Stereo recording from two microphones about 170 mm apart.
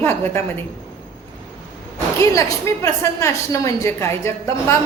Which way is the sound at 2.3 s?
15° left (ahead or behind).